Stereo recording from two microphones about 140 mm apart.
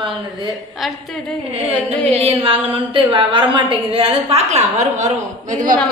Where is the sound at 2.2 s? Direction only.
40° right (ahead or behind); by 5.8 s 70° right (ahead or behind).